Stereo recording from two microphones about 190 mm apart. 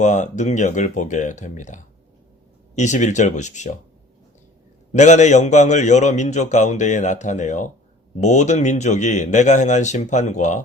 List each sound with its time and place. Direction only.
0.0 s a man's voice: 40° left (ahead or behind)
4.9 s a man's voice: 40° left (ahead or behind)